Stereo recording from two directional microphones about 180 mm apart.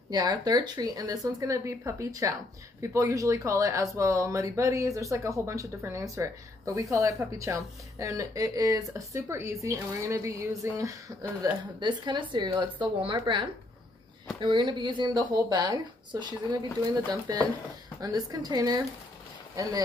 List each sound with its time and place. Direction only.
0.1 s a woman's voice: 20° right (ahead or behind)